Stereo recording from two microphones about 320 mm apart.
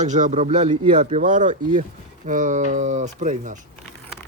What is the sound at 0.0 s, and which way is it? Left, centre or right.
A man's voice, right.